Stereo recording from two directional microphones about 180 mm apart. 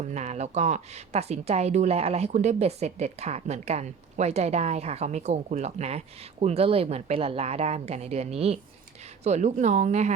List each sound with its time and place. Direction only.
0.0 s speech: 40° right (ahead or behind)